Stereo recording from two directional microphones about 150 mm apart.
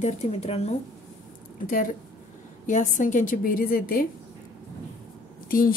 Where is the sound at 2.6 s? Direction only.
55° left (ahead or behind).